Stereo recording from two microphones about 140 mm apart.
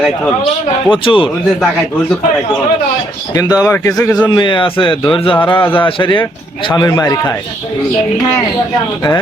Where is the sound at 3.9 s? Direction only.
10° left (ahead or behind).